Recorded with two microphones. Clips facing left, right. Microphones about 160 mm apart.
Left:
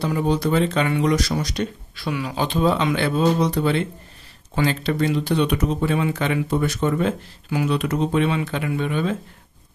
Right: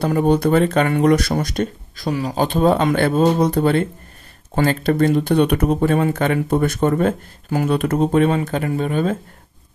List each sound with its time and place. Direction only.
0.0 s speech: 55° right (ahead or behind)